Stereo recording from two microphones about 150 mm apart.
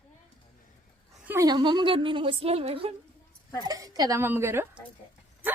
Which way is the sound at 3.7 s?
25° right (ahead or behind).